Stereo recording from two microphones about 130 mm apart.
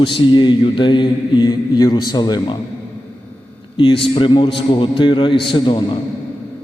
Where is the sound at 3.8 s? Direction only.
40° left (ahead or behind).